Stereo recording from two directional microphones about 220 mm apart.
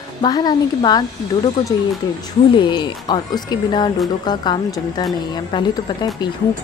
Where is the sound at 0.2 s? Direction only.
20° left (ahead or behind).